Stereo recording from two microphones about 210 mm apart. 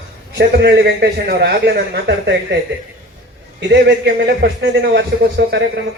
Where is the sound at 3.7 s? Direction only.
50° right (ahead or behind).